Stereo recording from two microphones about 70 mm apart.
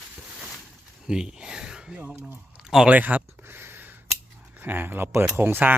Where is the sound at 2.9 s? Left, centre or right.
Right.